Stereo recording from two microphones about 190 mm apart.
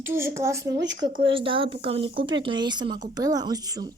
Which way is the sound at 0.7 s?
70° right (ahead or behind).